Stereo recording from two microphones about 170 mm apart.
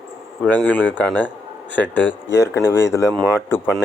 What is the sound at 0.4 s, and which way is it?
Speech, 10° left (ahead or behind).